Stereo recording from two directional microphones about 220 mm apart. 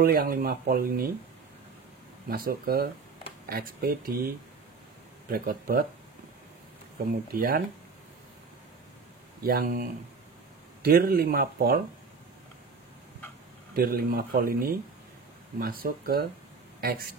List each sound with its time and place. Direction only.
0.0 s speech: 40° right (ahead or behind)
2.2 s speech: 40° right (ahead or behind)
5.3 s speech: 40° right (ahead or behind)
7.3 s speech: 40° right (ahead or behind)
9.4 s speech: 40° right (ahead or behind)
13.7 s speech: 45° right (ahead or behind)